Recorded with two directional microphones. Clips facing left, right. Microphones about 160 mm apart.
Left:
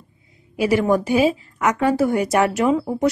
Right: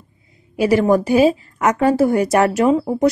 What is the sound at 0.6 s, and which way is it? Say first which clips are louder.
A woman's voice: right 3 dB; 40° right (ahead or behind).